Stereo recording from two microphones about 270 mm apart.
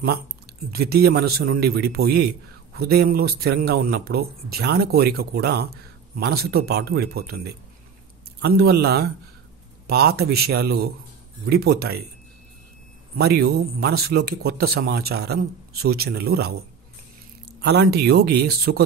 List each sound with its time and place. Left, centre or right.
0.7 s a man's voice: right
13.2 s a man's voice: right
17.6 s a man's voice: right